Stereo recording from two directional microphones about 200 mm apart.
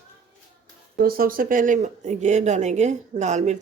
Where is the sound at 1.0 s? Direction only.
45° right (ahead or behind).